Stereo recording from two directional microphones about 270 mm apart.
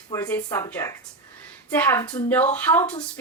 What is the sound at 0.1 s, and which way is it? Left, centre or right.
A woman's voice, centre.